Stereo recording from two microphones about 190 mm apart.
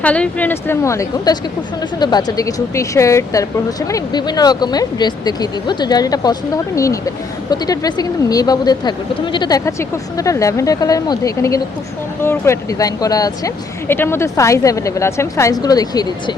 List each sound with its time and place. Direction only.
0.0 s speech: 5° left (ahead or behind)